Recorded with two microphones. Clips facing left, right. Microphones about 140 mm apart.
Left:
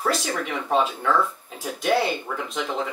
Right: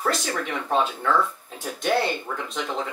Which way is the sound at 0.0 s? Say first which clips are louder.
Left 1 dB; 5° left (ahead or behind).